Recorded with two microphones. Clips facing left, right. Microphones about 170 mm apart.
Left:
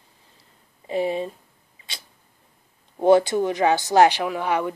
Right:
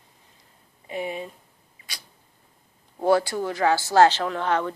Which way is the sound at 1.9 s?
25° left (ahead or behind).